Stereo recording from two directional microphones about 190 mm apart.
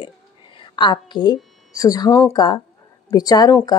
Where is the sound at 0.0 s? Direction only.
25° left (ahead or behind).